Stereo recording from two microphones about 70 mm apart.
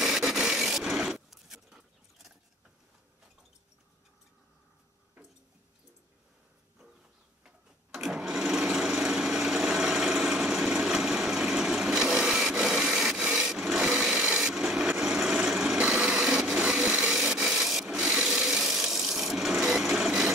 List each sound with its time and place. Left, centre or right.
0.0 s a sound: centre
7.4 s sewing machine: centre
13.2 s wood: centre
15.0 s vehicle: centre
16.5 s blender: right
17.3 s wood: centre
17.8 s wood: centre